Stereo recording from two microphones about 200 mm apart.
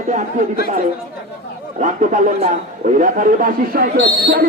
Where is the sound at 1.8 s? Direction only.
40° right (ahead or behind).